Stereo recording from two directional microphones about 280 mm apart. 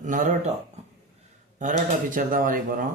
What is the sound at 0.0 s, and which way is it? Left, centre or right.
Speech, right.